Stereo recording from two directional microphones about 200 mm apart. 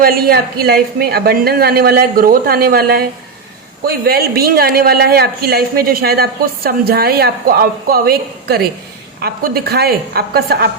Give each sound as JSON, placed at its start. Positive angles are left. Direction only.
{"t": 0.0, "sound": "a man's voice", "side_deg": -50}